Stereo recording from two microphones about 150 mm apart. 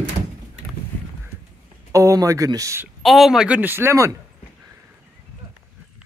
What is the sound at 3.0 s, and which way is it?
Speech, centre (ahead or behind).